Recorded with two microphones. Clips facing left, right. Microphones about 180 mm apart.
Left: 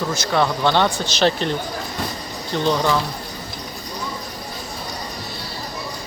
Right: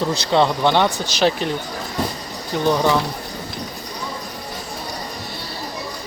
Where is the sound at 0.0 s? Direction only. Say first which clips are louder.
Right 3 dB; 20° right (ahead or behind).